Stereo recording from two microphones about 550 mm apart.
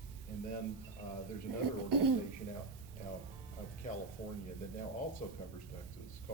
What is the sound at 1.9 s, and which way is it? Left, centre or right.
Speech, right.